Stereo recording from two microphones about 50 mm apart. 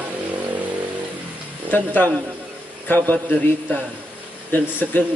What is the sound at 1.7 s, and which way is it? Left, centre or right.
A man's voice, left.